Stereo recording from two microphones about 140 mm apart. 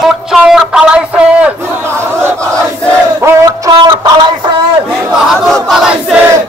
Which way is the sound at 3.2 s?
25° right (ahead or behind).